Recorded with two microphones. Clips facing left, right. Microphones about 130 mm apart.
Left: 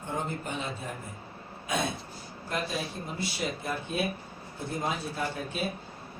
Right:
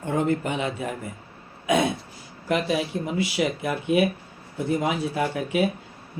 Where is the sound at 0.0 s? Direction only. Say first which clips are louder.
Right 10 dB; 85° right.